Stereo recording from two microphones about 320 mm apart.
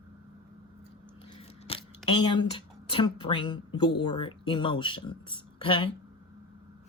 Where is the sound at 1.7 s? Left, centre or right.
Centre.